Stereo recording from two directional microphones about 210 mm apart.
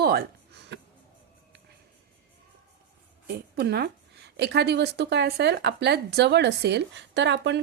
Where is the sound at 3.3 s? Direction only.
50° right (ahead or behind).